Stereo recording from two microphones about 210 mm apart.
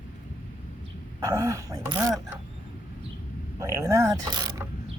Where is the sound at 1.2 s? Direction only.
15° right (ahead or behind).